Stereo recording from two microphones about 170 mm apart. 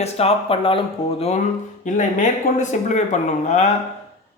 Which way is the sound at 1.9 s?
45° left (ahead or behind).